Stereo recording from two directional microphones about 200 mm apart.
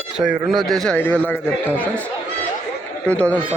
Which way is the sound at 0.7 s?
Centre (ahead or behind).